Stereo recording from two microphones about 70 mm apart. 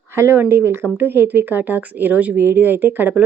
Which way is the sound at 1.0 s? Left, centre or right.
Right.